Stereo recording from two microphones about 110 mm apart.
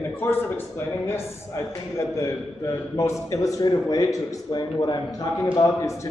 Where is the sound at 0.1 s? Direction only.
20° left (ahead or behind).